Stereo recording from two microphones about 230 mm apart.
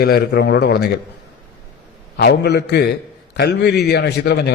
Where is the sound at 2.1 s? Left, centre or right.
Left.